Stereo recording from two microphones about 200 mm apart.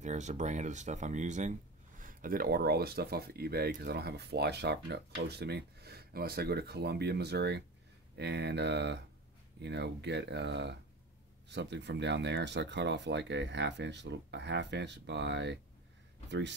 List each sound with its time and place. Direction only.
0.0 s speech: 35° right (ahead or behind); by 16.5 s 60° right (ahead or behind)